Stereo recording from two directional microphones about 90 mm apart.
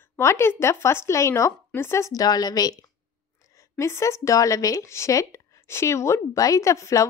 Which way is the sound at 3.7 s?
30° left (ahead or behind).